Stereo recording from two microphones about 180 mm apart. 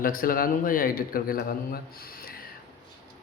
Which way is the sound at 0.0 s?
50° left (ahead or behind).